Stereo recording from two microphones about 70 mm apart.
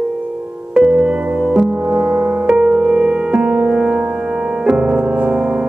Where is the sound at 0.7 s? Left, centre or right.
Centre.